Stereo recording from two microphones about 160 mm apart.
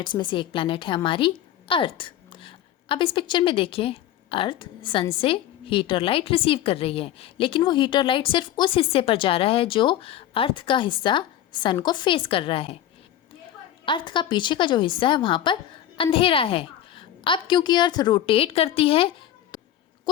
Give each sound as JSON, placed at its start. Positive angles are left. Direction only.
{"t": 0.0, "sound": "a woman's voice", "side_deg": 30}
{"t": 13.8, "sound": "a woman's voice", "side_deg": 30}